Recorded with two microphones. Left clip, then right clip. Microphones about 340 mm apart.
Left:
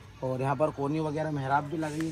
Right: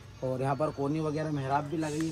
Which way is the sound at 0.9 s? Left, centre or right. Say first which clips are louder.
Left 1 dB; centre.